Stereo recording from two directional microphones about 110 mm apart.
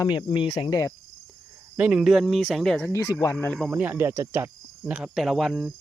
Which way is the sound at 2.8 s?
25° left (ahead or behind).